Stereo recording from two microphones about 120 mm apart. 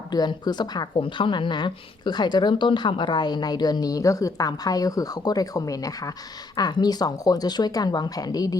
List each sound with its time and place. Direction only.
0.1 s speech: 35° left (ahead or behind)